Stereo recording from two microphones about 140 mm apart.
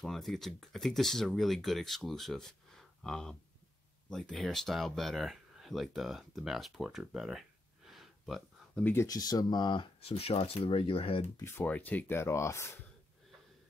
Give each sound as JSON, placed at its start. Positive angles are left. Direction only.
{"t": 0.0, "sound": "speech", "side_deg": 0}
{"t": 8.8, "sound": "speech", "side_deg": 20}
{"t": 11.4, "sound": "speech", "side_deg": 10}